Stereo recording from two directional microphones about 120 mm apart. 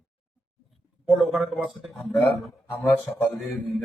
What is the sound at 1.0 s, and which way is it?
Speech, 5° right (ahead or behind).